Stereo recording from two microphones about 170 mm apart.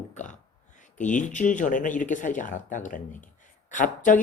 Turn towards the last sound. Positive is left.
turn(degrees=50)  # may be behind; listen again after turning